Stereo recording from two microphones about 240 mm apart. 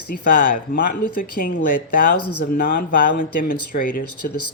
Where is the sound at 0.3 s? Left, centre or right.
Left.